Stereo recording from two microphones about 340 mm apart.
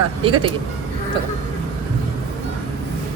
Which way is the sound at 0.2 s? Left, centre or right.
Centre.